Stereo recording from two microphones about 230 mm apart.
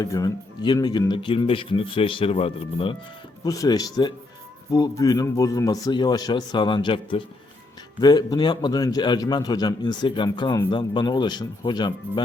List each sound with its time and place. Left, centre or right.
0.0 s a man's voice: centre